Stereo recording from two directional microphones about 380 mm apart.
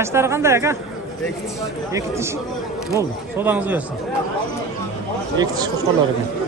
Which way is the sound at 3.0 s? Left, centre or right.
Centre.